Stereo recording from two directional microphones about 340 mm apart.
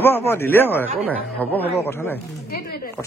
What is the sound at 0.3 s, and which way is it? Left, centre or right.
A man's voice, centre.